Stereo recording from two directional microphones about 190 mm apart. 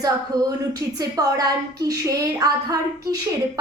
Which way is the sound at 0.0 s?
20° right (ahead or behind).